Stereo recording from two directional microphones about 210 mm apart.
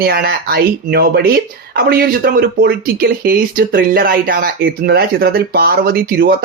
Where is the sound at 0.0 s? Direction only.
50° right (ahead or behind).